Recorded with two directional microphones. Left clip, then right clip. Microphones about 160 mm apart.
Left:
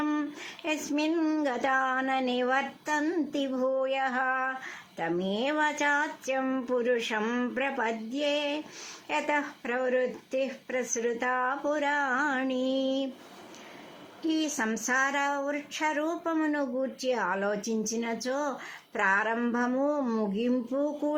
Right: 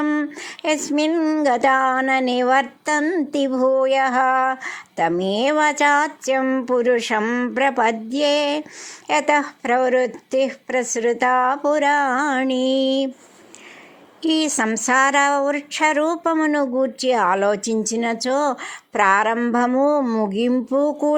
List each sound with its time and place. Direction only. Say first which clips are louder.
0.0 s a sound: right 9 dB; 35° right (ahead or behind)
0.6 s speech: right 10 dB; 45° right (ahead or behind)
3.0 s speech: right 9 dB; 30° right (ahead or behind)
3.3 s speech: right 13 dB; 45° right (ahead or behind)
6.4 s speech: right 10 dB; 35° right (ahead or behind)
6.7 s speech: right 10 dB; 45° right (ahead or behind)
7.6 s speech: right 15 dB; 50° right (ahead or behind)
14.2 s speech: right 10 dB; 50° right (ahead or behind)